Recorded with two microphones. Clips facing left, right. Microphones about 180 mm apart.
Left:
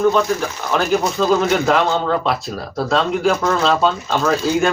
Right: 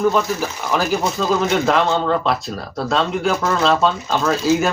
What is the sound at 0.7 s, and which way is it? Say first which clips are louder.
Speech: left 2 dB; centre (ahead or behind).